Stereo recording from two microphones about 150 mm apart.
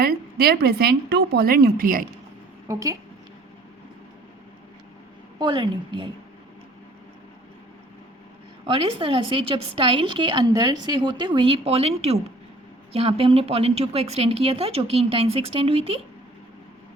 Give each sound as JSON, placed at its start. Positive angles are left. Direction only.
{"t": 0.0, "sound": "a woman's voice", "side_deg": -90}
{"t": 2.6, "sound": "a woman's voice", "side_deg": -20}
{"t": 5.4, "sound": "a woman's voice", "side_deg": -30}
{"t": 8.6, "sound": "a woman's voice", "side_deg": -35}